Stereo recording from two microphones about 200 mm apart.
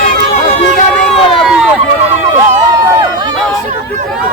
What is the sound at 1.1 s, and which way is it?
Run, 30° left (ahead or behind).